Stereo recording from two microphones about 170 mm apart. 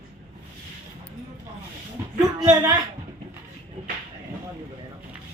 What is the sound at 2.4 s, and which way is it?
Speech, 20° right (ahead or behind).